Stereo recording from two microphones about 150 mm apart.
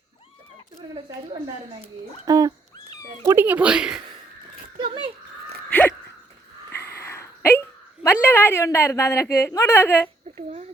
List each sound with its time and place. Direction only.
2.2 s speech: 25° right (ahead or behind); by 4.0 s 5° right (ahead or behind)
4.8 s speech: 35° right (ahead or behind)
5.6 s a sound: 10° left (ahead or behind)
8.0 s a woman's voice: 15° left (ahead or behind)
10.3 s a child's voice: 45° right (ahead or behind)